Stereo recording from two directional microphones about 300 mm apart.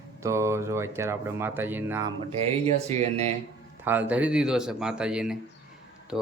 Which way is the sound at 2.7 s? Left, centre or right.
Right.